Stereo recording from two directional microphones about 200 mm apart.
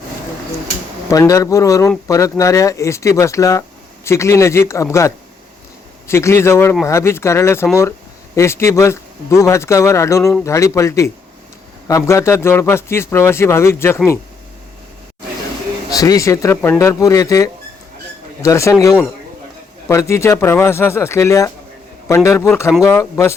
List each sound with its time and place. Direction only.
1.1 s a man's voice: 15° left (ahead or behind)
15.9 s a man's voice: 20° left (ahead or behind)